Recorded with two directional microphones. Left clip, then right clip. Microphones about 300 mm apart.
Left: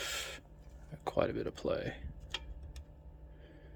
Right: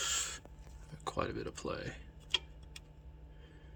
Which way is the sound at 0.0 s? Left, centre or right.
Centre.